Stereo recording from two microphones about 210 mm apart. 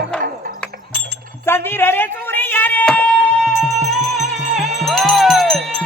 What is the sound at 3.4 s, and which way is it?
Music, centre (ahead or behind).